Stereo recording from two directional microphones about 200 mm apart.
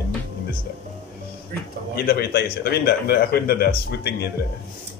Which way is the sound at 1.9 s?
50° left (ahead or behind).